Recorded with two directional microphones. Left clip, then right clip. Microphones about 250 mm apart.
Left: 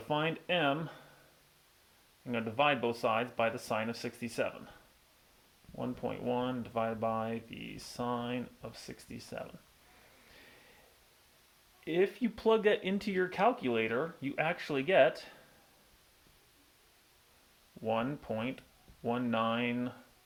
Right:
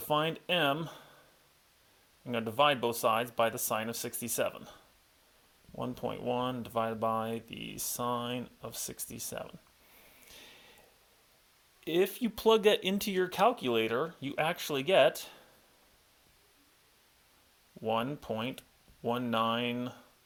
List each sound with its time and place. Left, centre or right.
0.1 s speech: right
2.2 s speech: right
5.7 s speech: right
11.9 s speech: right
17.8 s speech: right